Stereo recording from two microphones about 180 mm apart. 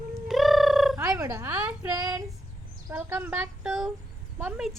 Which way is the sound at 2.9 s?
10° right (ahead or behind).